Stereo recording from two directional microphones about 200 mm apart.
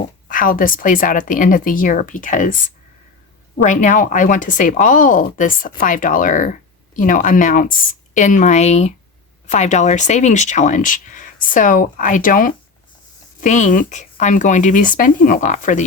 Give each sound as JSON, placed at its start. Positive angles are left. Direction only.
{"t": 0.0, "sound": "speech", "side_deg": 45}
{"t": 3.6, "sound": "speech", "side_deg": 40}